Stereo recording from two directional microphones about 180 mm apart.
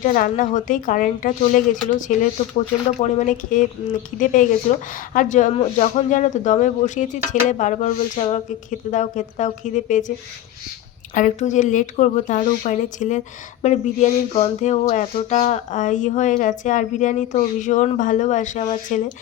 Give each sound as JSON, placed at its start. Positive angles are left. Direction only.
{"t": 0.0, "sound": "speech", "side_deg": 45}
{"t": 11.1, "sound": "speech", "side_deg": 45}